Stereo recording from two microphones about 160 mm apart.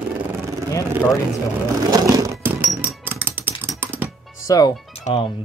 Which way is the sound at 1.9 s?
25° right (ahead or behind).